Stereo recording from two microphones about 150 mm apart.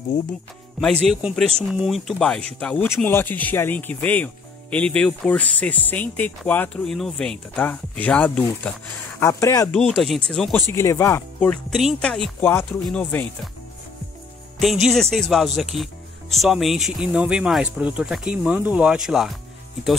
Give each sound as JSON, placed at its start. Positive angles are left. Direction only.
{"t": 1.0, "sound": "speech", "side_deg": 5}
{"t": 9.2, "sound": "speech", "side_deg": 20}
{"t": 9.7, "sound": "speech", "side_deg": 0}
{"t": 10.7, "sound": "speech", "side_deg": 20}
{"t": 14.6, "sound": "speech", "side_deg": 0}